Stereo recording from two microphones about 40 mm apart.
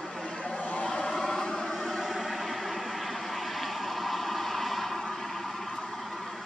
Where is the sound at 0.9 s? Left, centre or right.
Centre.